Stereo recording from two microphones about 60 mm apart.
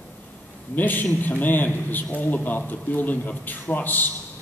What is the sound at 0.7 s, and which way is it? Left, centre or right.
A man's voice, left.